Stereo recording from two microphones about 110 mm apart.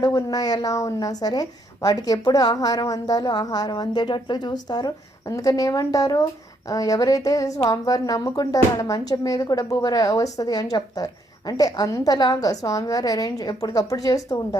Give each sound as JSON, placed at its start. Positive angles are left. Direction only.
{"t": 0.0, "sound": "a woman's voice", "side_deg": 35}